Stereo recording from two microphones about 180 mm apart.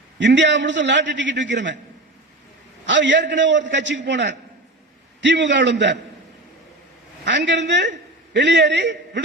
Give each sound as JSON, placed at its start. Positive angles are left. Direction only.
{"t": 0.2, "sound": "a man's voice", "side_deg": -90}
{"t": 2.8, "sound": "a man's voice", "side_deg": -90}
{"t": 7.3, "sound": "a man's voice", "side_deg": -80}